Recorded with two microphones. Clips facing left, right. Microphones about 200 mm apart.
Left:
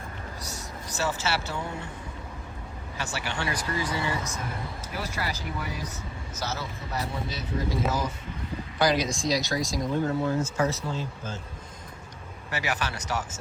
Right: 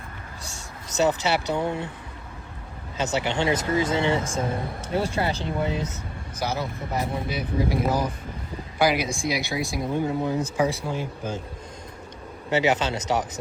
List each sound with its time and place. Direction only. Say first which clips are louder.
0.4 s speech: left 2 dB; 25° right (ahead or behind)
3.0 s speech: right 8 dB; 20° right (ahead or behind)
12.5 s speech: right 9 dB; 20° right (ahead or behind)